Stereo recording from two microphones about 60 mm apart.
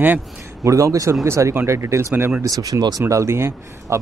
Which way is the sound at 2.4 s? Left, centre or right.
Right.